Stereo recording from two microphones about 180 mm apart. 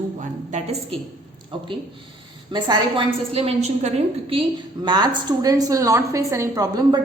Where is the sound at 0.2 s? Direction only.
40° right (ahead or behind).